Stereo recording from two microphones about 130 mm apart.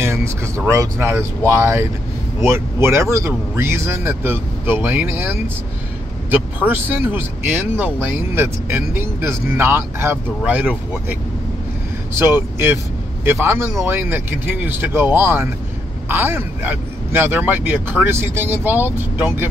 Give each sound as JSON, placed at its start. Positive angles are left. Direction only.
{"t": 0.0, "sound": "a sound", "side_deg": -20}
{"t": 0.7, "sound": "speech", "side_deg": -20}
{"t": 12.2, "sound": "speech", "side_deg": -20}